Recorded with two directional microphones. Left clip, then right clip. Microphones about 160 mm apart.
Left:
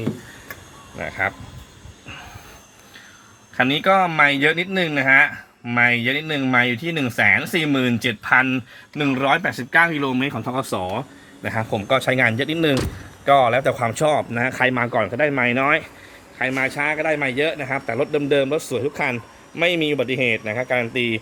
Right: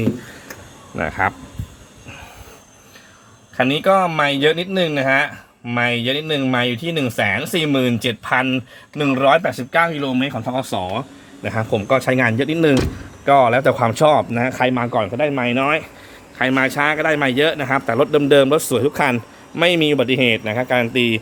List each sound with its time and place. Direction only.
1.2 s a man's voice: 25° right (ahead or behind)
3.6 s speech: 10° left (ahead or behind)
9.1 s speech: 20° left (ahead or behind); by 15.9 s centre (ahead or behind)
16.4 s a man's voice: 25° right (ahead or behind)